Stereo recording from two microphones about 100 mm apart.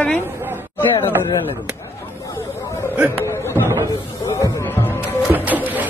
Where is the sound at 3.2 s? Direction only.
25° left (ahead or behind).